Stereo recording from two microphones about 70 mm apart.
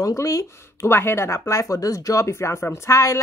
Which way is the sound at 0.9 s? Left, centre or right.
Left.